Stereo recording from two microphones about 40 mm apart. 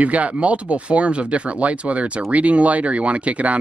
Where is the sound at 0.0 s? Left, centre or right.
Right.